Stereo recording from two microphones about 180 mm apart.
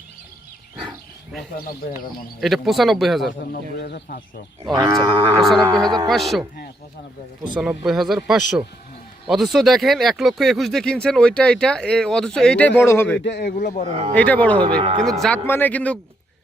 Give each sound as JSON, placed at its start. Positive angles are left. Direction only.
{"t": 0.8, "sound": "a sound", "side_deg": 0}
{"t": 1.8, "sound": "speech", "side_deg": 55}
{"t": 2.4, "sound": "speech", "side_deg": 0}
{"t": 3.4, "sound": "speech", "side_deg": 60}
{"t": 4.7, "sound": "livestock", "side_deg": -20}
{"t": 5.4, "sound": "a sound", "side_deg": 0}
{"t": 6.1, "sound": "speech", "side_deg": 0}
{"t": 7.5, "sound": "speech", "side_deg": -5}
{"t": 13.2, "sound": "a man's voice", "side_deg": 70}
{"t": 13.6, "sound": "speech", "side_deg": 45}
{"t": 14.2, "sound": "a man's voice", "side_deg": 10}
{"t": 14.8, "sound": "speech", "side_deg": -35}
{"t": 15.2, "sound": "a man's voice", "side_deg": 10}